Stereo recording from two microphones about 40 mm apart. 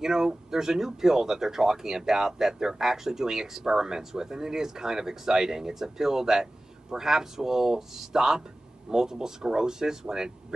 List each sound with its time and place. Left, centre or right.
0.0 s speech: centre